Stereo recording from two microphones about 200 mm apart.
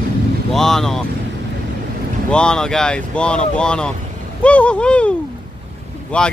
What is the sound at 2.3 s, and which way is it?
Speech, 5° left (ahead or behind).